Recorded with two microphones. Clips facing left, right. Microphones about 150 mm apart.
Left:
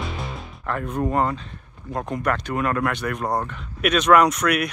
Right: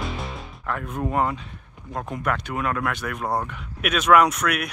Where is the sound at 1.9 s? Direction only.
Centre (ahead or behind).